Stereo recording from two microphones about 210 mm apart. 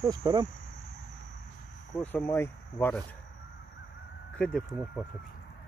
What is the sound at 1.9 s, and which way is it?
Speech, 10° left (ahead or behind).